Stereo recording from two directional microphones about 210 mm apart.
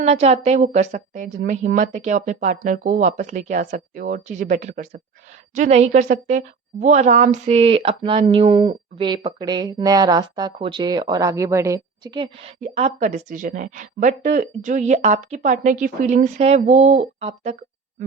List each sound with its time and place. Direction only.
0.0 s a woman's voice: 30° right (ahead or behind)